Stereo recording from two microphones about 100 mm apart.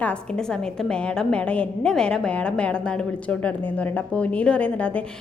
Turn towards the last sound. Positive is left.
turn(degrees=15)  # may be behind; listen again after turning